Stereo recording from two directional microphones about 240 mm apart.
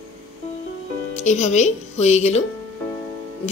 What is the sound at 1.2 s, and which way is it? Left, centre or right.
Speech, left.